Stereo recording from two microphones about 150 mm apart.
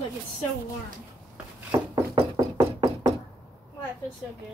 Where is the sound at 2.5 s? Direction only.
35° right (ahead or behind).